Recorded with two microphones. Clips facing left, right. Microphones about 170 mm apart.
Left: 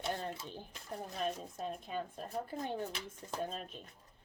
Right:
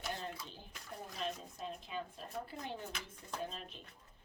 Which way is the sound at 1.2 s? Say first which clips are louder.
Left 4 dB; 45° left (ahead or behind).